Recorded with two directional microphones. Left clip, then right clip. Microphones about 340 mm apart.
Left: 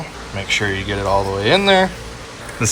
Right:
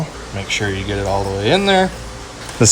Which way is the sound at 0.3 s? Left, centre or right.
Centre.